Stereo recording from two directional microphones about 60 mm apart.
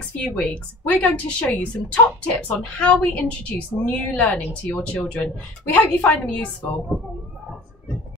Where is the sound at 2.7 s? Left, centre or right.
Left.